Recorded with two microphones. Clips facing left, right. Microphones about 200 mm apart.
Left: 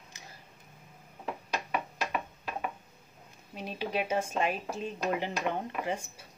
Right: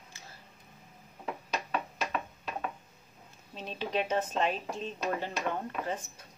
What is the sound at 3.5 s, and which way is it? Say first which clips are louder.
Speech: even; 10° left (ahead or behind).